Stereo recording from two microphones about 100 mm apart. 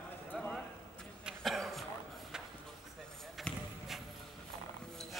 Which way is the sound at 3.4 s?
Centre (ahead or behind).